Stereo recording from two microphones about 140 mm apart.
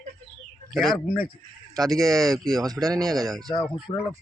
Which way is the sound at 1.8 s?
Centre (ahead or behind).